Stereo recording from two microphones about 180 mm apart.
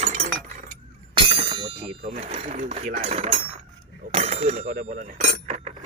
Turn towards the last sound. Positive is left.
turn(degrees=-40)  # may be behind; listen again after turning